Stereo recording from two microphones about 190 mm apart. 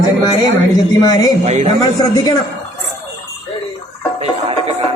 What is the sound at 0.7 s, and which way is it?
Speech, 20° left (ahead or behind).